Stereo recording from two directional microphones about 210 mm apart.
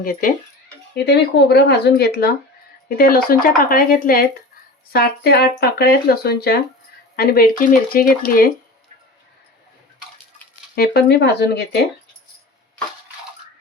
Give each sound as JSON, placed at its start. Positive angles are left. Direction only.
{"t": 0.0, "sound": "speech", "side_deg": 40}
{"t": 0.9, "sound": "speech", "side_deg": 50}
{"t": 10.8, "sound": "speech", "side_deg": 50}